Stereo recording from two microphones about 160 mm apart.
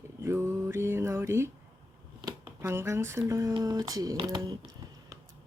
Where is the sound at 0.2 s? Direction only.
15° right (ahead or behind).